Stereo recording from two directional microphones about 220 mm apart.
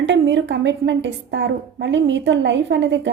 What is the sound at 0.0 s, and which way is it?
A woman's voice, 55° right (ahead or behind).